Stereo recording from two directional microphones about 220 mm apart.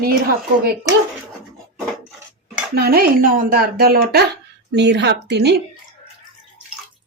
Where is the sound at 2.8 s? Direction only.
45° right (ahead or behind).